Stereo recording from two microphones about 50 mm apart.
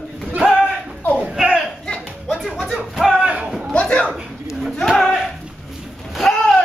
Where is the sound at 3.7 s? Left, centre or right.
Left.